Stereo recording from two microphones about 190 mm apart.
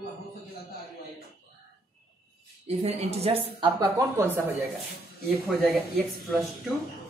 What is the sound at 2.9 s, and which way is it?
Speech, 35° right (ahead or behind).